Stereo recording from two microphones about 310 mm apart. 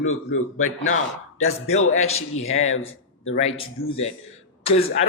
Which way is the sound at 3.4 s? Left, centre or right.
Centre.